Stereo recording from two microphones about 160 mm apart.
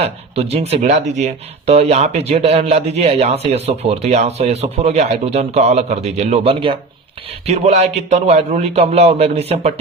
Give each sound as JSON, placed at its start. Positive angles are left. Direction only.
{"t": 0.0, "sound": "speech", "side_deg": -40}